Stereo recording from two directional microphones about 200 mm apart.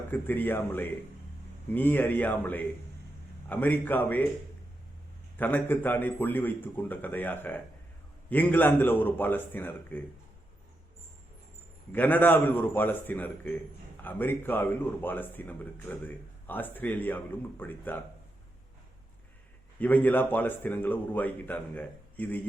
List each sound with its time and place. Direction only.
0.1 s speech: 10° left (ahead or behind)
5.4 s speech: 10° left (ahead or behind)
11.9 s speech: 10° left (ahead or behind)
19.8 s speech: 10° left (ahead or behind)